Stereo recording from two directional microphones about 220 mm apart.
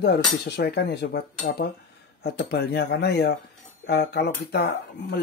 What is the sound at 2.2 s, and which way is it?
Dishes, 45° left (ahead or behind).